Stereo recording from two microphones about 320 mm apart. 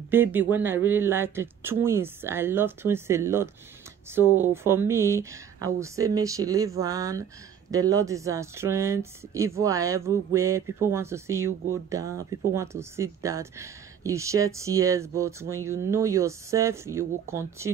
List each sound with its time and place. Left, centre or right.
0.1 s speech: centre